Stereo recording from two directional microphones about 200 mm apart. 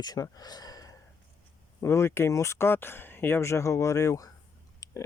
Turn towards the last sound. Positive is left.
turn(degrees=15)  # may be behind; listen again after turning